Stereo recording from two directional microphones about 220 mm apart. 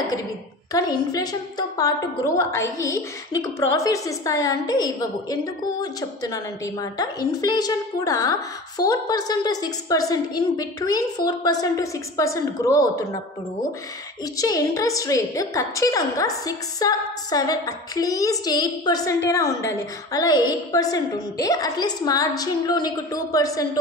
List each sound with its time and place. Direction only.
0.7 s a woman's voice: 15° left (ahead or behind)